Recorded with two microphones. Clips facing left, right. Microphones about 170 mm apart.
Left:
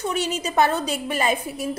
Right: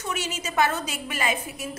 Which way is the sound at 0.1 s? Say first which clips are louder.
Left 1 dB; 35° left (ahead or behind).